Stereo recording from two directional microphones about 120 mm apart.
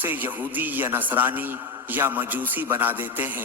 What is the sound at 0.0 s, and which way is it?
A man's voice, 15° right (ahead or behind).